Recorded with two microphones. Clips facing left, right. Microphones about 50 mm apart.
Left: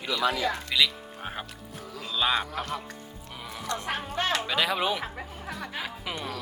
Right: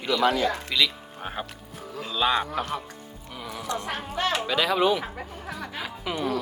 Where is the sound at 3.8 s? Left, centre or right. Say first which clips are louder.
Even; left.